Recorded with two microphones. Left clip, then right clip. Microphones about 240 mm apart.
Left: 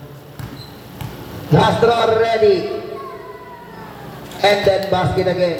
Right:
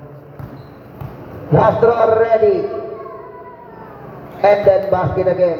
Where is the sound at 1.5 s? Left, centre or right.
Left.